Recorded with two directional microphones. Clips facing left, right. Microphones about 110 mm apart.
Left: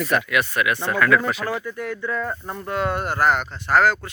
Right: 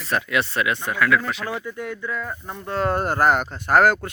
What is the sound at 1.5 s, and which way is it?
Speech, 15° right (ahead or behind).